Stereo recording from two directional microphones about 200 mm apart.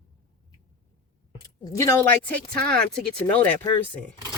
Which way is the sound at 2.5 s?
45° right (ahead or behind).